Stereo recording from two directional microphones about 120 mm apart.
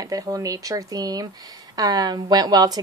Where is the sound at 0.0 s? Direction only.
30° right (ahead or behind).